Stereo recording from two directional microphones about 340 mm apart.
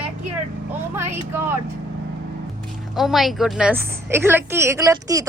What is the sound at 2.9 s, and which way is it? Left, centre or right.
A woman's voice, centre.